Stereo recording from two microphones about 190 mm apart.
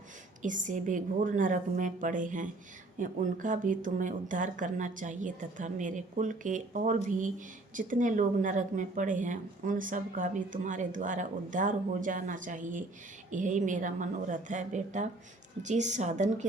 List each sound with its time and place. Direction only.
0.4 s a woman's voice: 40° right (ahead or behind)